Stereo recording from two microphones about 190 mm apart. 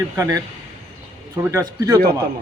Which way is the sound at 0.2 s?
15° right (ahead or behind).